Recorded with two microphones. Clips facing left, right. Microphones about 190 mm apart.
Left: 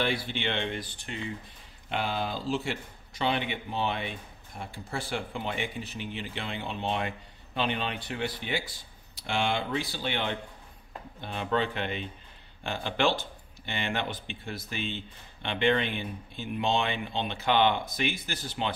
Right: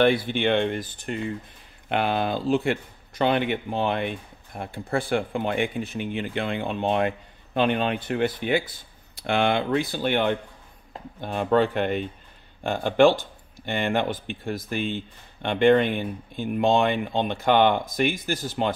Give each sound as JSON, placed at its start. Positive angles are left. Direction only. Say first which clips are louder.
{"t": 0.0, "sound": "speech", "louder": "right 9 dB", "side_deg": -55}
{"t": 1.9, "sound": "speech", "louder": "right 7 dB", "side_deg": -60}